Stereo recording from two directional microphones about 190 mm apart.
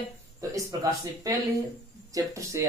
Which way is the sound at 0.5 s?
15° right (ahead or behind).